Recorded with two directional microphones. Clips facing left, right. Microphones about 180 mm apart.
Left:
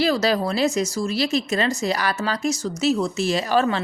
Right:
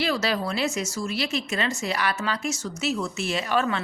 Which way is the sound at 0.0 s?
40° left (ahead or behind).